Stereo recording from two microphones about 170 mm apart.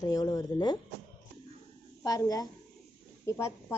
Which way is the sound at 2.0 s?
20° left (ahead or behind).